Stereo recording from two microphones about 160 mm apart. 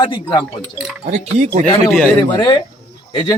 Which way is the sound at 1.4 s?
5° left (ahead or behind).